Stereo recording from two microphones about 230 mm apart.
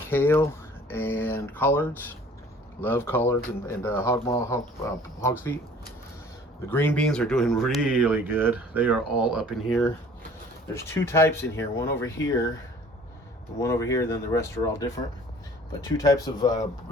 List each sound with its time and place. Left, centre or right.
0.1 s speech: centre
6.7 s speech: centre
13.6 s speech: centre